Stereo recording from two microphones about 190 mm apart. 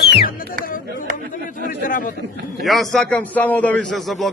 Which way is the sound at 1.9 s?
45° left (ahead or behind).